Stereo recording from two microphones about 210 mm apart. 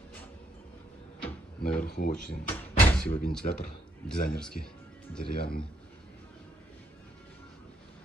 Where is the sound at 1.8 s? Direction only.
45° left (ahead or behind).